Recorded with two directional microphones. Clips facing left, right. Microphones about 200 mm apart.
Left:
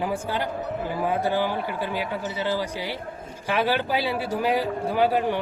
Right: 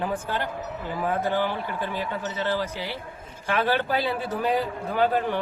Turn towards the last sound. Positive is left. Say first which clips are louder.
# left 1 dB
turn(degrees=10)  # may be behind; listen again after turning